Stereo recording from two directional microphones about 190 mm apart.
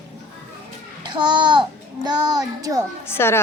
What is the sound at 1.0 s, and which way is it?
A child's voice, 25° right (ahead or behind).